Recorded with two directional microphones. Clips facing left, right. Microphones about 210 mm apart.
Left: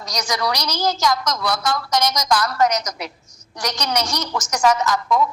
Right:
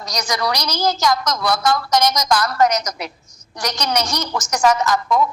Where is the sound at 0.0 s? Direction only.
50° right (ahead or behind).